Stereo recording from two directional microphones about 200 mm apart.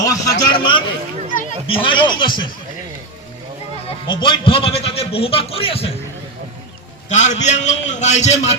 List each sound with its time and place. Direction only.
0.0 s a man's voice: 15° left (ahead or behind)
4.0 s a man's voice: 25° left (ahead or behind)
7.1 s a man's voice: 35° left (ahead or behind)